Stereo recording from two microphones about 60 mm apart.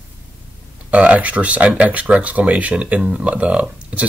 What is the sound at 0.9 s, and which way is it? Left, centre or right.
Speech, right.